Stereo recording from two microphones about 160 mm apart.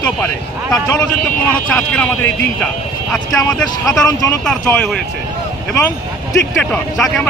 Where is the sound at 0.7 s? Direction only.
20° left (ahead or behind).